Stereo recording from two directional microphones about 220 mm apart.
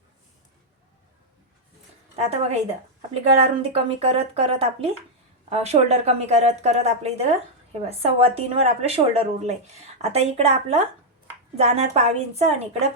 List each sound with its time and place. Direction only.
2.1 s speech: 30° right (ahead or behind)